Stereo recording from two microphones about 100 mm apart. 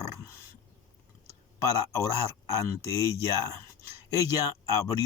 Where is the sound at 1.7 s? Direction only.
35° left (ahead or behind).